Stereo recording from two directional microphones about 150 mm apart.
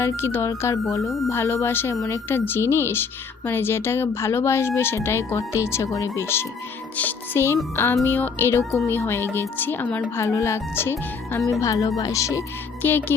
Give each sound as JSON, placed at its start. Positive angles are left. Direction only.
{"t": 0.0, "sound": "speech", "side_deg": 15}